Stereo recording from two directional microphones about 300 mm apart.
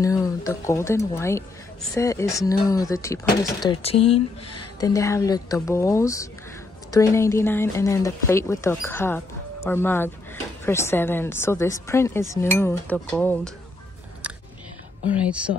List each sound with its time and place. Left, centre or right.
0.0 s speech: centre
15.2 s speech: centre